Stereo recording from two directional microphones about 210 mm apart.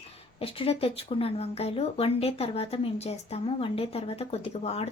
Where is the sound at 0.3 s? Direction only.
25° left (ahead or behind).